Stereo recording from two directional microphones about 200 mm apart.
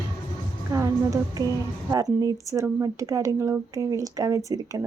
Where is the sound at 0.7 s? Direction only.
15° right (ahead or behind).